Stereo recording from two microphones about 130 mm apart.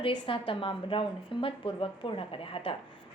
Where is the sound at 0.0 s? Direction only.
40° left (ahead or behind).